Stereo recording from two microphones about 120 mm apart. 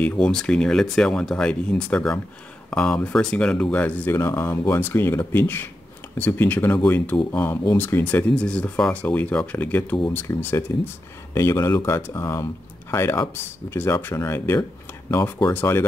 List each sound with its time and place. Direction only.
0.0 s speech: 10° left (ahead or behind)